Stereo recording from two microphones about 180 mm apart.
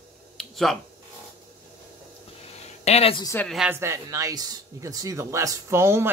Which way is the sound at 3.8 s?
15° right (ahead or behind).